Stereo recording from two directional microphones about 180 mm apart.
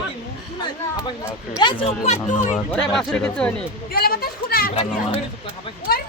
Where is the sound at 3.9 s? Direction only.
55° left (ahead or behind).